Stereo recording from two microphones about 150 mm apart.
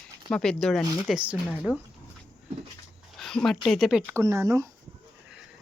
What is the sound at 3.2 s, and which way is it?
Speech, centre (ahead or behind).